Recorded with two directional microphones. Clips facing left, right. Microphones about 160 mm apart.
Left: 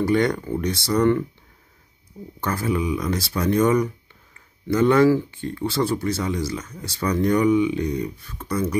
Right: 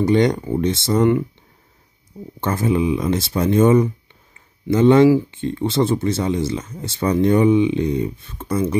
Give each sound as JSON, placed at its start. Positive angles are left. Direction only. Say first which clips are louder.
{"t": 0.0, "sound": "speech", "louder": "right 4 dB", "side_deg": -20}
{"t": 2.4, "sound": "speech", "louder": "right 5 dB", "side_deg": -25}